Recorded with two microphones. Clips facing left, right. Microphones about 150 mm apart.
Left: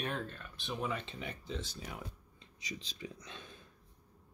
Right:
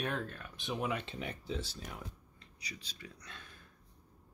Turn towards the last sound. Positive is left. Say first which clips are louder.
# left 3 dB
turn(degrees=20)  # may be behind; listen again after turning